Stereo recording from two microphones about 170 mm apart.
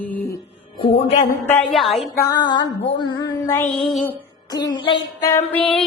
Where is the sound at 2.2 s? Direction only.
25° left (ahead or behind).